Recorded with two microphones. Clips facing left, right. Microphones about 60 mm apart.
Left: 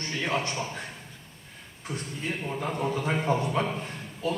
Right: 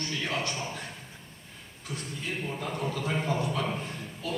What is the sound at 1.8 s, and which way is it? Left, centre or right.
A man's voice, left.